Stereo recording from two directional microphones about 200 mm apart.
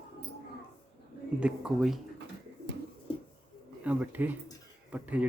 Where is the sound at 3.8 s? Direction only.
10° right (ahead or behind).